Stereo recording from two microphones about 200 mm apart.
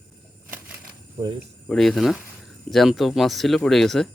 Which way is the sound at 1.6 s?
Centre (ahead or behind).